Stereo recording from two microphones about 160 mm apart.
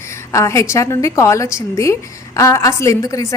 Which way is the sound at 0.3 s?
20° left (ahead or behind).